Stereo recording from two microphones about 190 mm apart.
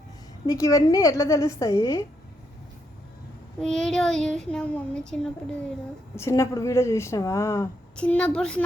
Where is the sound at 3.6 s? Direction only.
5° left (ahead or behind).